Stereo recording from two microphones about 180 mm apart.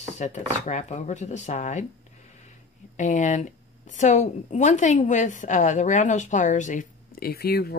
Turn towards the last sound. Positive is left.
turn(degrees=60)  # may be behind; listen again after turning